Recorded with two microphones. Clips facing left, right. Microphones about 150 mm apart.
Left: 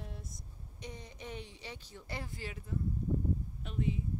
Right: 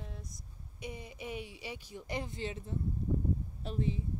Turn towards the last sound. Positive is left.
turn(degrees=-35)  # may be behind; listen again after turning